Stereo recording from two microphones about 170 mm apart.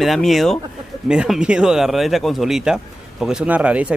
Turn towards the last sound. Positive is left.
turn(degrees=-10)  # may be behind; listen again after turning